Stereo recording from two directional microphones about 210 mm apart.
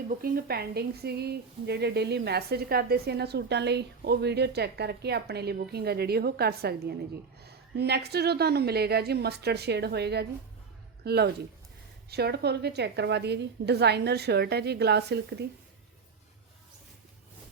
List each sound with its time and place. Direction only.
0.1 s a woman's voice: 45° right (ahead or behind)